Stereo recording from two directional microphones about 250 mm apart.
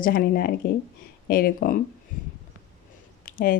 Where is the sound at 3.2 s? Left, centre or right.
Left.